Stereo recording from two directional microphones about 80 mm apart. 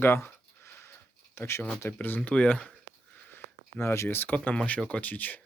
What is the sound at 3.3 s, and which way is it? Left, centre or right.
Speech, left.